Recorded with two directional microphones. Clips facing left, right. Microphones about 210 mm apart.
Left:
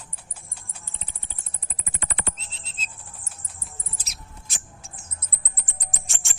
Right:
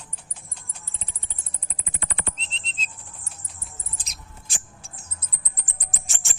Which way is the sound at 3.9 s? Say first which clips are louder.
Even; 5° left (ahead or behind).